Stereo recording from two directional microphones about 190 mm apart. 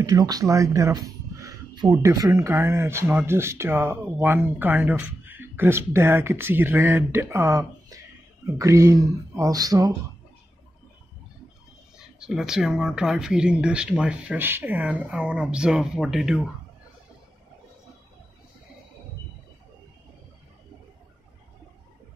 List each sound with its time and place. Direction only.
0.0 s speech: 20° right (ahead or behind)
12.0 s speech: 5° right (ahead or behind)